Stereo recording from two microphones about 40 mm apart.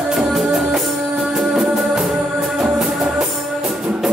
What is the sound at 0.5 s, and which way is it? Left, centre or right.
Music, centre.